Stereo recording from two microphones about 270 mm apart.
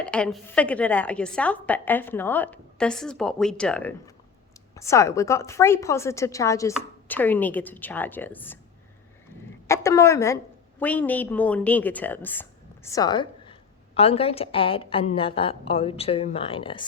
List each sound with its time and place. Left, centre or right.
0.0 s a woman's voice: centre
9.6 s a woman's voice: centre